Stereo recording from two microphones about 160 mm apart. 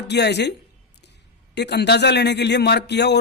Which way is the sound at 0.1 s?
90° left.